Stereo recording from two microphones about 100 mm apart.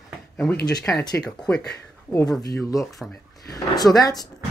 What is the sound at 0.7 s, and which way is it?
Speech, 40° left (ahead or behind).